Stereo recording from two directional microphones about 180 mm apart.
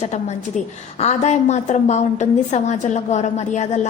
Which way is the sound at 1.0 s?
40° left (ahead or behind).